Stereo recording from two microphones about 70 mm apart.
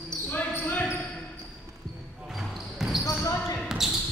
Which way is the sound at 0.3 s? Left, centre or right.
Left.